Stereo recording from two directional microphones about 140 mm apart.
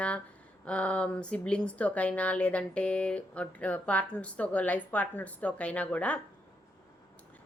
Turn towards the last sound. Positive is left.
turn(degrees=10)  # may be behind; listen again after turning